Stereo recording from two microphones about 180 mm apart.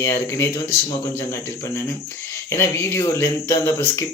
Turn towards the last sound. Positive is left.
turn(degrees=15)  # may be behind; listen again after turning